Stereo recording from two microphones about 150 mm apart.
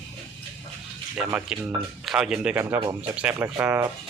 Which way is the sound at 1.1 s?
10° right (ahead or behind).